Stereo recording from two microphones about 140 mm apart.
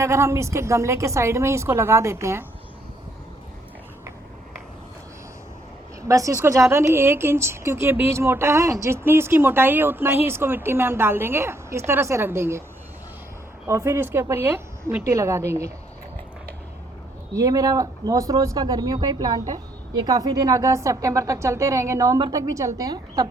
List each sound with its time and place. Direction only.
0.0 s speech: 20° right (ahead or behind)
6.0 s speech: 20° right (ahead or behind)
13.7 s speech: 20° right (ahead or behind)
17.3 s speech: 25° right (ahead or behind)